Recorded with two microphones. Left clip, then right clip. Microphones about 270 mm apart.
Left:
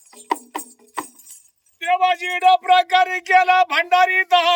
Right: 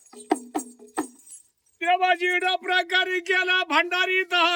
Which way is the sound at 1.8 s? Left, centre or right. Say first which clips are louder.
Left 3 dB; centre.